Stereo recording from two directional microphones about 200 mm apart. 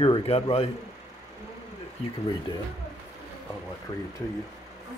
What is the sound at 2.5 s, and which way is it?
Speech, 25° left (ahead or behind).